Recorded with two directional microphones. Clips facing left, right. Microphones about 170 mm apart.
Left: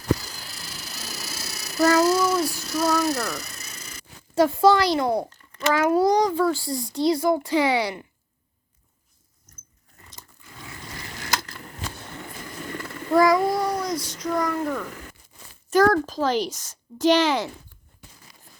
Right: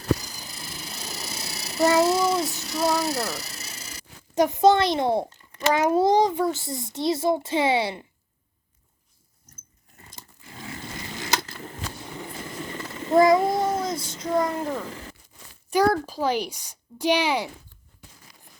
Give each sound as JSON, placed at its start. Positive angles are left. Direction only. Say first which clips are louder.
{"t": 0.3, "sound": "a sound", "louder": "right 1 dB", "side_deg": -20}
{"t": 4.4, "sound": "a child's voice", "louder": "left 1 dB", "side_deg": -20}
{"t": 10.2, "sound": "biting", "louder": "right 3 dB", "side_deg": -25}
{"t": 11.2, "sound": "a sound", "louder": "right 1 dB", "side_deg": -20}
{"t": 12.9, "sound": "a child's voice", "louder": "right 1 dB", "side_deg": -25}
{"t": 15.7, "sound": "speech", "louder": "left 3 dB", "side_deg": -10}